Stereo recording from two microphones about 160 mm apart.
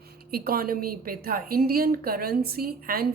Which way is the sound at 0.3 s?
70° right (ahead or behind).